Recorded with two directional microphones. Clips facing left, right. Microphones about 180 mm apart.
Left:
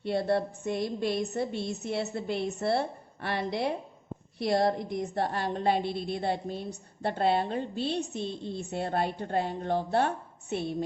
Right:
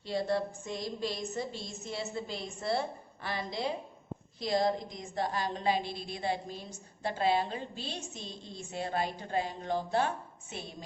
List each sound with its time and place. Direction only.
0.0 s a woman's voice: 60° left (ahead or behind)